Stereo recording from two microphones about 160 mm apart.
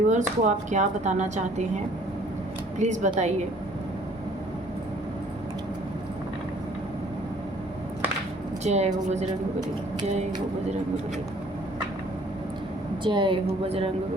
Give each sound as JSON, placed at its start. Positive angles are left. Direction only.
{"t": 0.1, "sound": "speech", "side_deg": -50}
{"t": 2.7, "sound": "speech", "side_deg": -50}
{"t": 8.6, "sound": "speech", "side_deg": -45}
{"t": 13.1, "sound": "a woman's voice", "side_deg": -30}